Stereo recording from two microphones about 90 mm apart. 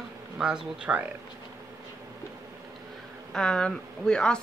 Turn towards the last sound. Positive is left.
turn(degrees=10)  # may be behind; listen again after turning